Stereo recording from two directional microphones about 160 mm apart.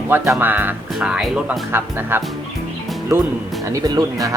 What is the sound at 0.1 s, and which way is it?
Speech, 10° right (ahead or behind).